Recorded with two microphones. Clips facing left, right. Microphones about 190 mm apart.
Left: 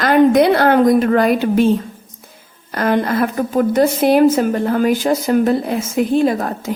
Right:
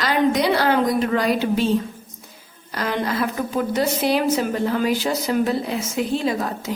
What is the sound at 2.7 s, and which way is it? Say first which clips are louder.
A woman's voice: left 7 dB; 50° left (ahead or behind).